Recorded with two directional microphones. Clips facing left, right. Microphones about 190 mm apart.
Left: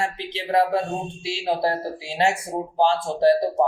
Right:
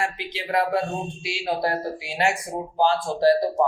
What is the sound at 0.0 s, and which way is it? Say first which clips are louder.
Speech: left 1 dB; 25° left (ahead or behind).